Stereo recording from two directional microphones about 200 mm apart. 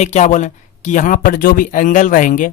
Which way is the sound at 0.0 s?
35° left (ahead or behind).